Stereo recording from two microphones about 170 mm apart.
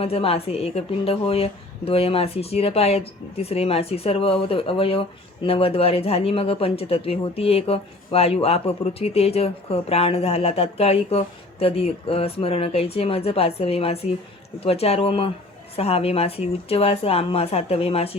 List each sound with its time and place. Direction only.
0.0 s a woman's voice: 35° left (ahead or behind)